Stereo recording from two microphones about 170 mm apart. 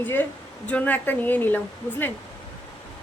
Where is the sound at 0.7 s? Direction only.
10° left (ahead or behind).